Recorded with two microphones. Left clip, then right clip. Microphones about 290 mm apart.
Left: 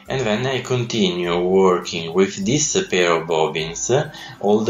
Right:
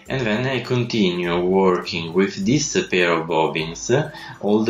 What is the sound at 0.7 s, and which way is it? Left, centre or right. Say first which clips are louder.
Speech: left 1 dB; centre.